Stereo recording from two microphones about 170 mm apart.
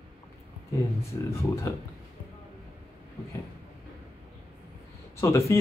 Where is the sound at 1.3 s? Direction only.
15° left (ahead or behind).